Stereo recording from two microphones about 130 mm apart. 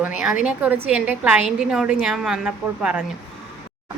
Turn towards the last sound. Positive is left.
turn(degrees=-5)  # may be behind; listen again after turning